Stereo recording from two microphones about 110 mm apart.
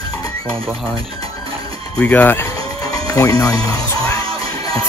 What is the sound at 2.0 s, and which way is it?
Speech, 15° left (ahead or behind).